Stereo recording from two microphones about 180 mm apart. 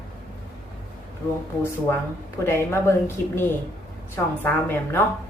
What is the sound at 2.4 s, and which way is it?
Speech, 15° left (ahead or behind).